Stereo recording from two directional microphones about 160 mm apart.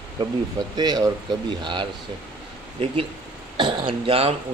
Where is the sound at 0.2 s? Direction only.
25° right (ahead or behind).